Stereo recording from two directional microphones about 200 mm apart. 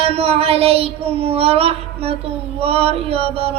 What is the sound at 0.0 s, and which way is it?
Child singing, 30° right (ahead or behind).